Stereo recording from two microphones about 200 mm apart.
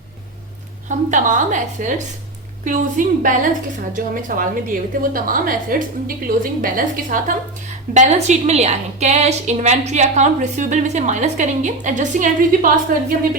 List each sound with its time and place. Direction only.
0.9 s a woman's voice: 40° right (ahead or behind)
3.0 s a woman's voice: 40° right (ahead or behind)